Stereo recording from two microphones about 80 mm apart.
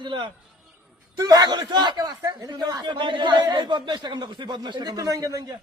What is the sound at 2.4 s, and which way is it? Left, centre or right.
A man's voice, right.